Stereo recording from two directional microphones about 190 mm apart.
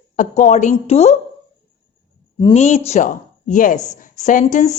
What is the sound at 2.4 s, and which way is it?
A woman's voice, 35° left (ahead or behind).